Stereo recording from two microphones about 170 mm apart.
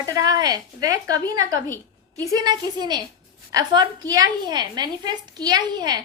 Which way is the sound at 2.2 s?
25° right (ahead or behind).